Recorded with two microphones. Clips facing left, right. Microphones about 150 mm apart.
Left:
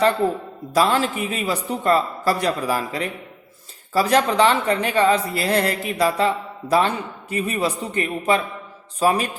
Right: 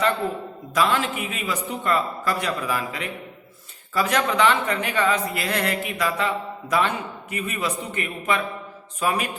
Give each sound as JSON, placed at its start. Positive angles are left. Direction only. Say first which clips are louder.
{"t": 0.7, "sound": "speech", "louder": "left 3 dB", "side_deg": 35}